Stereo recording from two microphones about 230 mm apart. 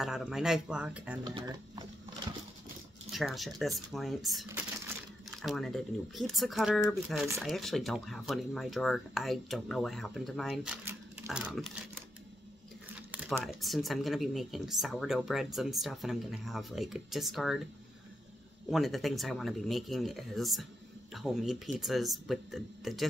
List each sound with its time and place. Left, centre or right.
0.0 s speech: centre
1.2 s speech: centre
3.1 s speech: centre
13.1 s speech: centre
18.7 s speech: centre